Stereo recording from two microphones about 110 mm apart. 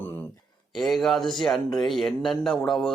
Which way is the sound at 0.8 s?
Centre (ahead or behind).